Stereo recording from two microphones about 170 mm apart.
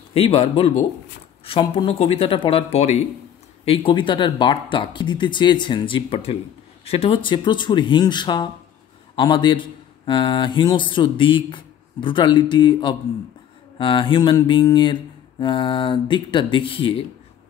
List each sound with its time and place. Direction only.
0.1 s a man's voice: 35° left (ahead or behind)